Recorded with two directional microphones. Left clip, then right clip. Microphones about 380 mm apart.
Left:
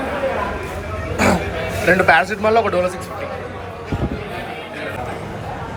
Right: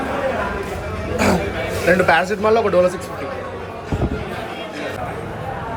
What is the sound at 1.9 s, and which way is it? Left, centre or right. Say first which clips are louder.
Speech: left 2 dB; centre.